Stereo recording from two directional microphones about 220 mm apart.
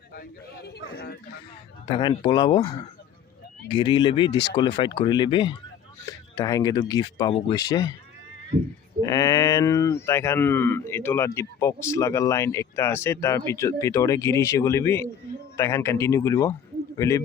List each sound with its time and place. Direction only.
0.1 s speech: 45° left (ahead or behind)
1.9 s speech: 20° left (ahead or behind)
9.0 s speech: 15° left (ahead or behind)